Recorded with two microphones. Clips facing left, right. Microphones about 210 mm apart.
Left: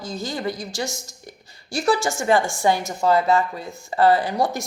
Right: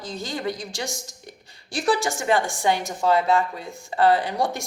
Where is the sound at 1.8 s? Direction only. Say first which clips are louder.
Left 2 dB; 15° right (ahead or behind).